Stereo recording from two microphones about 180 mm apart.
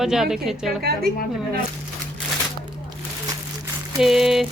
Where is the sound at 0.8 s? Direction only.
60° right (ahead or behind).